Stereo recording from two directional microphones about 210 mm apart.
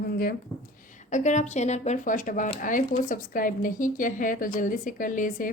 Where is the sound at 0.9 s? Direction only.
35° left (ahead or behind).